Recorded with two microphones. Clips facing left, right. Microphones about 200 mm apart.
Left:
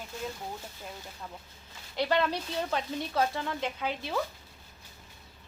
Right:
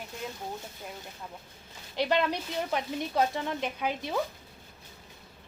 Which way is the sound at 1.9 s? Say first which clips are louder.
Right 1 dB; 20° right (ahead or behind).